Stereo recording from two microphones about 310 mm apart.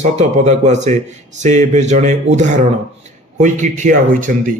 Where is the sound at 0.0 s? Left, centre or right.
Right.